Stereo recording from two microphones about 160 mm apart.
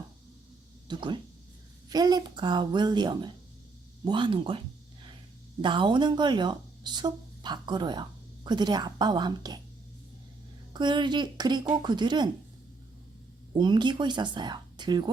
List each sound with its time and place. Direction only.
0.9 s speech: 30° right (ahead or behind)
5.6 s speech: 30° right (ahead or behind)
10.8 s speech: 30° right (ahead or behind)
13.5 s speech: 30° right (ahead or behind)